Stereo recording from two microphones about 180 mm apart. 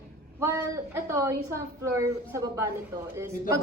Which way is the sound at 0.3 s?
15° right (ahead or behind).